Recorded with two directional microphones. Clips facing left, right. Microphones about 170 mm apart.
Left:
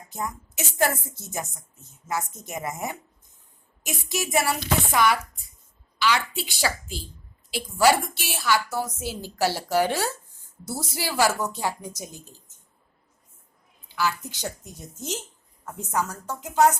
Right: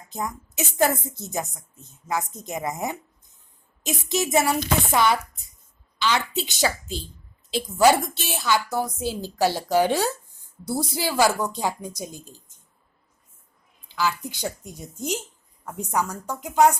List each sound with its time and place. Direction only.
0.1 s a woman's voice: 20° right (ahead or behind)
14.3 s a woman's voice: 15° right (ahead or behind)